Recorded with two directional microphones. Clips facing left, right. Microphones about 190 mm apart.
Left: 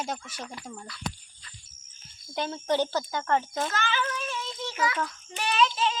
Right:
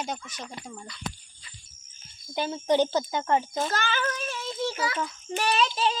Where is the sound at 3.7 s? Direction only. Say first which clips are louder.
Right 1 dB; 40° right (ahead or behind).